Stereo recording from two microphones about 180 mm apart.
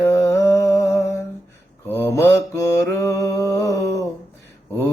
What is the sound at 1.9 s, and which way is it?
Mantra, 15° left (ahead or behind).